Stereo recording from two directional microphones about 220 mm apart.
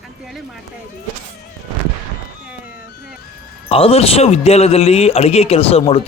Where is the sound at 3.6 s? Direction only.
25° left (ahead or behind).